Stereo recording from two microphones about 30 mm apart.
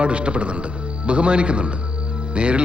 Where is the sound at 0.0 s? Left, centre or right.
Right.